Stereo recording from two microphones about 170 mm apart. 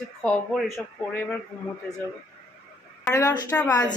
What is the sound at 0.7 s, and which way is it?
Speech, 10° left (ahead or behind).